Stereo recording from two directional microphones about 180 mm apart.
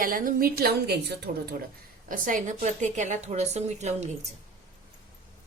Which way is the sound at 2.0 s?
50° right (ahead or behind).